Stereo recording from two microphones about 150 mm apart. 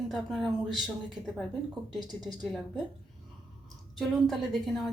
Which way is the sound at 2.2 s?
Centre (ahead or behind).